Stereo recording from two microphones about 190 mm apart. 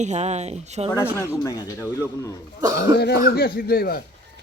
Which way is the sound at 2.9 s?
55° left (ahead or behind).